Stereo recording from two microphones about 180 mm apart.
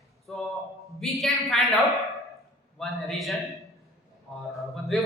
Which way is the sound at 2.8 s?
Centre (ahead or behind).